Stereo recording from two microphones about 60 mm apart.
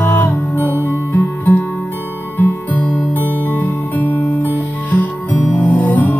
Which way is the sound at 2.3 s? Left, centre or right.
Left.